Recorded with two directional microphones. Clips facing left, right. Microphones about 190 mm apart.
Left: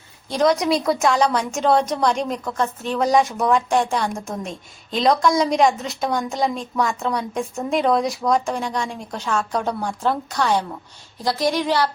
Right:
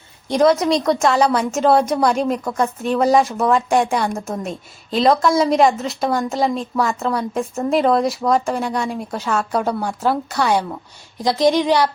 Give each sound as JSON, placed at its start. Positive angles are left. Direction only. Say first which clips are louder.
{"t": 0.4, "sound": "a woman's voice", "louder": "right 3 dB", "side_deg": 0}